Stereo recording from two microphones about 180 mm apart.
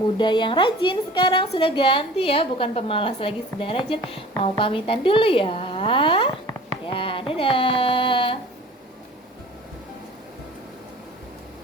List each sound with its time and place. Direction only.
0.2 s a woman's voice: 25° left (ahead or behind)